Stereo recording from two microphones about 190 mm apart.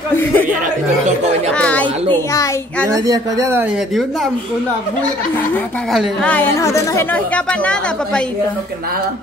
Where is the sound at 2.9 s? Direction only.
20° right (ahead or behind); by 4.2 s centre (ahead or behind).